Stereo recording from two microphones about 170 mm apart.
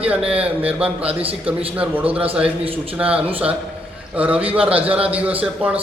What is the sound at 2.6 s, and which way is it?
Speech, 35° right (ahead or behind).